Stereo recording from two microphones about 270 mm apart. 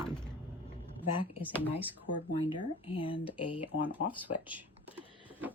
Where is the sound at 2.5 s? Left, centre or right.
Centre.